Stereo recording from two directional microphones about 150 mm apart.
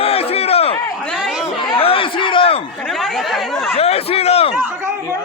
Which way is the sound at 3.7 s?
40° left (ahead or behind).